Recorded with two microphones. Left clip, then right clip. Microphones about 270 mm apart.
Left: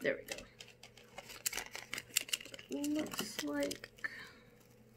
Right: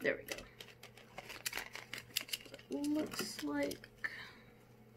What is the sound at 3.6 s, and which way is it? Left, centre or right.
Speech, left.